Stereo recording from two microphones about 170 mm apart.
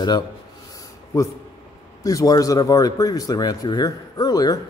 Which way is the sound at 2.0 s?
20° left (ahead or behind).